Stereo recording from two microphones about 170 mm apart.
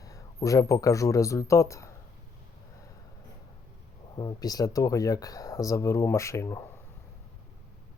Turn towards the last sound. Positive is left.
turn(degrees=15)  # may be behind; listen again after turning